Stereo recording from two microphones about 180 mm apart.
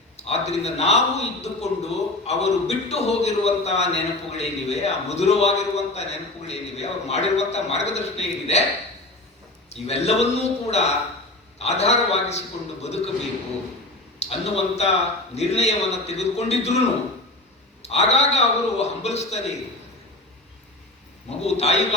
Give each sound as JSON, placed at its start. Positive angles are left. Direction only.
{"t": 0.2, "sound": "a man's voice", "side_deg": 35}
{"t": 9.6, "sound": "a man's voice", "side_deg": 35}
{"t": 14.2, "sound": "a man's voice", "side_deg": 35}
{"t": 17.8, "sound": "a man's voice", "side_deg": 35}
{"t": 21.2, "sound": "a man's voice", "side_deg": 35}